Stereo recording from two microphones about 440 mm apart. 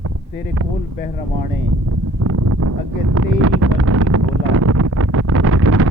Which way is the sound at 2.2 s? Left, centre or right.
Right.